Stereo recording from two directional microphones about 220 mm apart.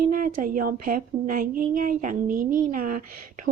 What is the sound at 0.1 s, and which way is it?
Speech, 40° right (ahead or behind).